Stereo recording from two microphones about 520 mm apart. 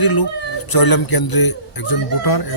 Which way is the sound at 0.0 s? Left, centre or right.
Left.